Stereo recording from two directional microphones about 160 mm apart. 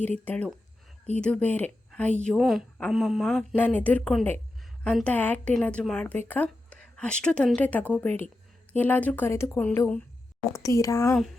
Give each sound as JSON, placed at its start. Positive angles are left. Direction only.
{"t": 0.0, "sound": "speech", "side_deg": 10}